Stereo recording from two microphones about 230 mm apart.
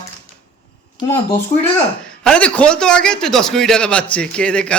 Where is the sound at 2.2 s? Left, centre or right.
Centre.